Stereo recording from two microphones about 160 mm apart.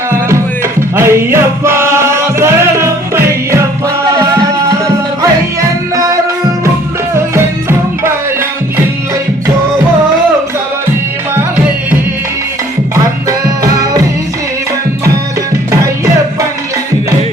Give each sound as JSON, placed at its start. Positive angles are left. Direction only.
{"t": 0.9, "sound": "music", "side_deg": -15}
{"t": 7.3, "sound": "music", "side_deg": -15}
{"t": 13.2, "sound": "music", "side_deg": -20}